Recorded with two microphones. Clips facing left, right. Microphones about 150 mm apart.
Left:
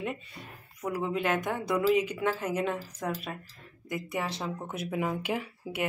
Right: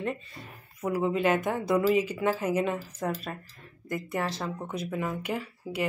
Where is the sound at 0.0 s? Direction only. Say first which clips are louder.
Right 3 dB; 5° left (ahead or behind).